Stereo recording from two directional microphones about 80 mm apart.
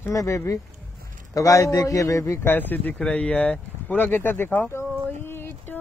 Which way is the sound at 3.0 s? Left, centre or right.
Centre.